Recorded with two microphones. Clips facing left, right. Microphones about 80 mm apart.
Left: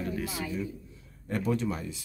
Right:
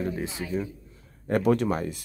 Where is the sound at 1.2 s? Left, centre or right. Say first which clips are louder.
Right 7 dB; right.